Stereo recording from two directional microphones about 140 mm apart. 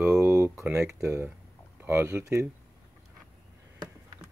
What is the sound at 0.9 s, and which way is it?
Speech, 20° right (ahead or behind).